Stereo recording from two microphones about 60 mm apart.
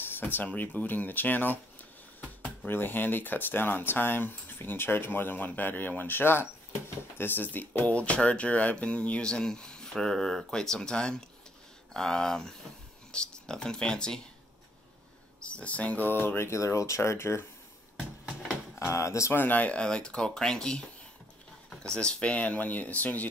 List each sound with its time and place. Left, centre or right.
0.0 s speech: left; by 14.2 s centre
15.4 s speech: left
16.4 s speech: left
17.9 s a sound: centre
18.8 s speech: left
19.3 s speech: left